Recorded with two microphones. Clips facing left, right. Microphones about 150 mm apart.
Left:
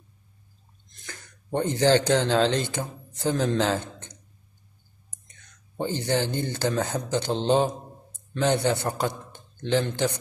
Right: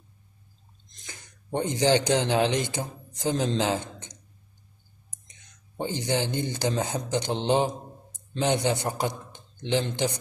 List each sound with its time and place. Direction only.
1.0 s speech: 15° right (ahead or behind)
5.3 s a man's voice: 15° right (ahead or behind)